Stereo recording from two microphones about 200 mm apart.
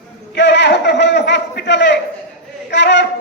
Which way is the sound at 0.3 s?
60° left (ahead or behind).